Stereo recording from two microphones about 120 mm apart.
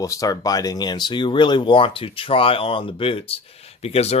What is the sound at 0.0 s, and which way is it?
Speech, 30° left (ahead or behind).